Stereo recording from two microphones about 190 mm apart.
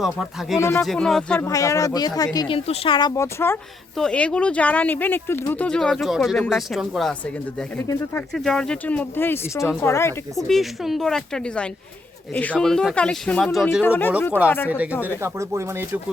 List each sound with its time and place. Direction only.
0.6 s speech: 15° left (ahead or behind)
0.9 s speech: centre (ahead or behind)
1.4 s speech: 15° left (ahead or behind)
3.2 s speech: 15° left (ahead or behind)
7.8 s speech: 10° left (ahead or behind)
10.3 s speech: centre (ahead or behind)
13.8 s speech: 10° left (ahead or behind)
15.2 s speech: 15° right (ahead or behind)